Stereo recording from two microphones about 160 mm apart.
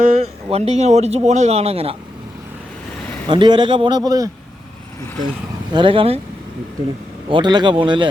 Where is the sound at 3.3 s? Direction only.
30° right (ahead or behind).